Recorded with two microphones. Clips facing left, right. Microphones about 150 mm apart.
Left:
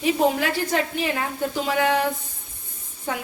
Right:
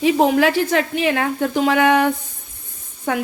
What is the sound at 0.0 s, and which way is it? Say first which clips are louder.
A woman's voice: right 6 dB; 80° right.